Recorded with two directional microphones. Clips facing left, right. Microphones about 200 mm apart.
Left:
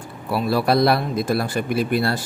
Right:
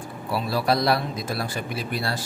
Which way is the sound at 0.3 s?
55° left (ahead or behind).